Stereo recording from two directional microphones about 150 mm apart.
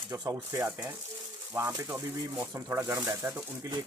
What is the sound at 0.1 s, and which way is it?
Speech, 25° right (ahead or behind).